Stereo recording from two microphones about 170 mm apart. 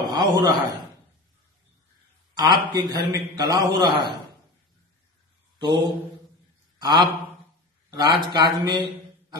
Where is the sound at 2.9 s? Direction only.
20° right (ahead or behind).